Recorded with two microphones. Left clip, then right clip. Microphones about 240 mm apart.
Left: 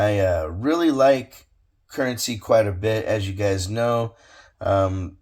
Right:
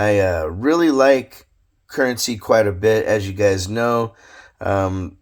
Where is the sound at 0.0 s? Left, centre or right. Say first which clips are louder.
Right 3 dB; right.